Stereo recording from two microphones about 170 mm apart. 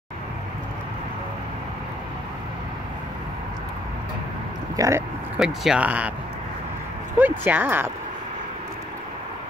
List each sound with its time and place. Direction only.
4.7 s speech: 20° right (ahead or behind)
5.4 s speech: 5° right (ahead or behind)
7.2 s speech: 10° right (ahead or behind)